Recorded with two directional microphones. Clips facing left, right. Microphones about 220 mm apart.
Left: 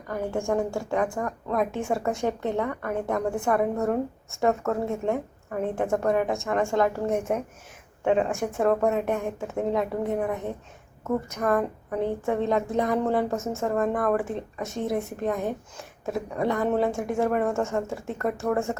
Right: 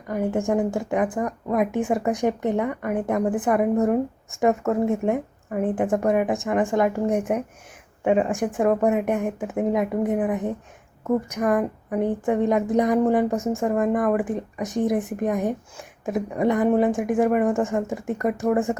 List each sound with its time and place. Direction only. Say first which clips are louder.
0.1 s a woman's voice: right 4 dB; 20° right (ahead or behind)